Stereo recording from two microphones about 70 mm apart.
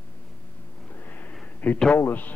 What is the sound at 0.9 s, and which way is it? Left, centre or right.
Sniff, left.